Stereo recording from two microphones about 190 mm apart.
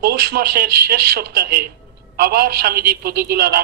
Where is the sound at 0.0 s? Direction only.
55° right (ahead or behind).